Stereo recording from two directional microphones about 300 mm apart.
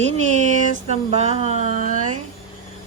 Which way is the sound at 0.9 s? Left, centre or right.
Right.